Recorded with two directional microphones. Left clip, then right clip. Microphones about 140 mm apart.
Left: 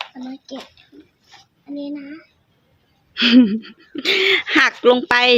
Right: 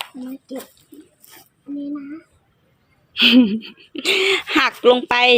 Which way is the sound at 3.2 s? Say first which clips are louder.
Right 1 dB; 25° left (ahead or behind).